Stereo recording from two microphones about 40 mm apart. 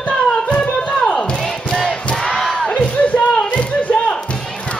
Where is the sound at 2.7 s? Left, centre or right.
Left.